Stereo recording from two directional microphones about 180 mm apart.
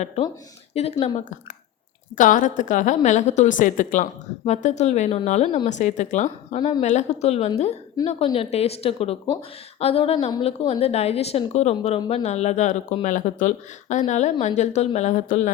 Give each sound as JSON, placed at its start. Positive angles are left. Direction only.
{"t": 0.7, "sound": "speech", "side_deg": 35}
{"t": 2.1, "sound": "speech", "side_deg": 45}